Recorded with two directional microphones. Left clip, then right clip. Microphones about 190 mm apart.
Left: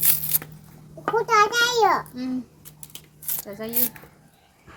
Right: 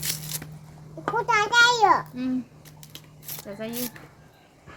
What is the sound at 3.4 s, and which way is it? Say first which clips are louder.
Speech: left 1 dB; 15° left (ahead or behind).